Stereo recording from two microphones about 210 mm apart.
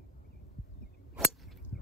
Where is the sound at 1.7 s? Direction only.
45° left (ahead or behind).